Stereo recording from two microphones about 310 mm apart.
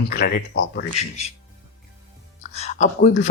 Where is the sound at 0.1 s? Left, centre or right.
Left.